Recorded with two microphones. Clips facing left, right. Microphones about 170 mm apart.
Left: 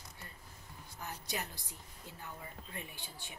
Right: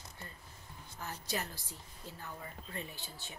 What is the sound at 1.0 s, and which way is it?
A woman's voice, 15° left (ahead or behind).